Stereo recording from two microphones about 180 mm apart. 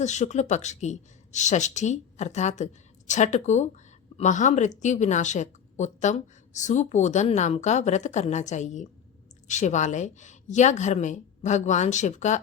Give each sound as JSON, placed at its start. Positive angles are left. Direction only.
{"t": 0.0, "sound": "a woman's voice", "side_deg": 40}